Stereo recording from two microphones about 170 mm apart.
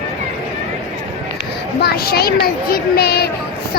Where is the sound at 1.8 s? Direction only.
70° left (ahead or behind).